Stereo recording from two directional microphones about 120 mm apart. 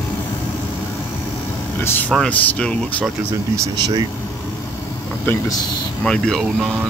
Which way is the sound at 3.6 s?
35° right (ahead or behind).